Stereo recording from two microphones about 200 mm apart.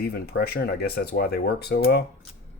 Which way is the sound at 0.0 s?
50° left (ahead or behind).